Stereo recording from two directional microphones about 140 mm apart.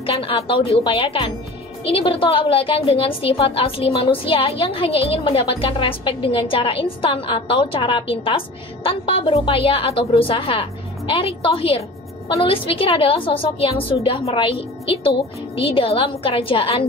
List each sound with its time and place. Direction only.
0.0 s a woman's voice: 40° left (ahead or behind)